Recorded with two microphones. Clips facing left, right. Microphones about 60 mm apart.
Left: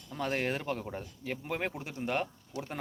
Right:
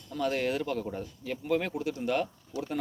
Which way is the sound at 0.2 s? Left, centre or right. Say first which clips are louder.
Right 3 dB; left.